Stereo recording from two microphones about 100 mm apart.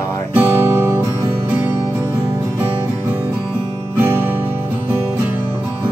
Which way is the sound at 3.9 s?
25° right (ahead or behind).